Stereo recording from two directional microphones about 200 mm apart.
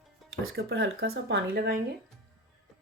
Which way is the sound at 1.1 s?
65° right (ahead or behind).